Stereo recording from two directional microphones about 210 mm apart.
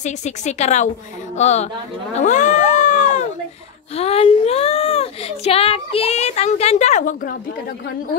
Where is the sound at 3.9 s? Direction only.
30° left (ahead or behind).